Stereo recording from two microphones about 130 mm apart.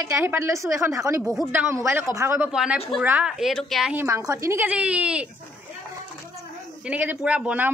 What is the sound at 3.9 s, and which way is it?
Speech, 15° right (ahead or behind).